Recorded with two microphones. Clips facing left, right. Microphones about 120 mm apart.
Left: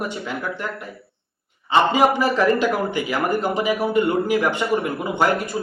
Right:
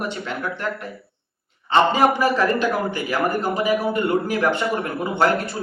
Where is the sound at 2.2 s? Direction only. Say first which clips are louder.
Left 1 dB; 15° left (ahead or behind).